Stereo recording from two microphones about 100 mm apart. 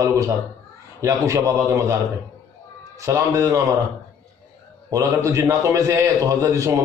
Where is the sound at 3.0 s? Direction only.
30° right (ahead or behind).